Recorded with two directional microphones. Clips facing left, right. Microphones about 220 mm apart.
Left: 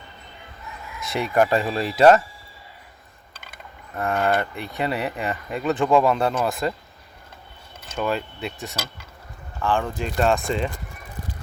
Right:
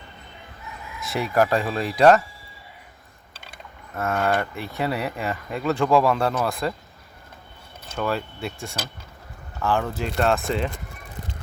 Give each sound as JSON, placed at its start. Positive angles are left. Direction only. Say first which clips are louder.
{"t": 0.9, "sound": "mechanisms", "louder": "left 1 dB", "side_deg": 0}
{"t": 3.5, "sound": "mechanisms", "louder": "even", "side_deg": 0}
{"t": 8.1, "sound": "mechanisms", "louder": "left 1 dB", "side_deg": 0}
{"t": 9.6, "sound": "speech", "louder": "even", "side_deg": -5}
{"t": 10.0, "sound": "mechanisms", "louder": "left 1 dB", "side_deg": 0}